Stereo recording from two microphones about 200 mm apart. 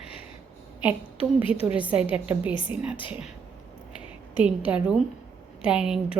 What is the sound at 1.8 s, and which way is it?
Speech, 5° right (ahead or behind).